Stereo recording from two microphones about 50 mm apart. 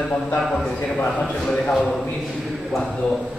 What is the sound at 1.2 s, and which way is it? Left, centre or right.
Speech, left.